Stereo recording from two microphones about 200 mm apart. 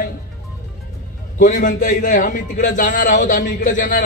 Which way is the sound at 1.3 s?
45° left (ahead or behind).